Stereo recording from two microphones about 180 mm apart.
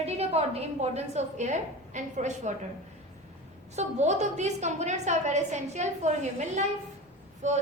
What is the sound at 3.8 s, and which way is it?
A woman's voice, 40° right (ahead or behind).